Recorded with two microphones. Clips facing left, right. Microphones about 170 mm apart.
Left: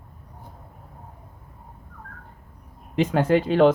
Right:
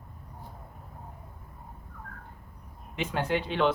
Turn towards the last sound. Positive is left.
turn(degrees=40)  # may be behind; listen again after turning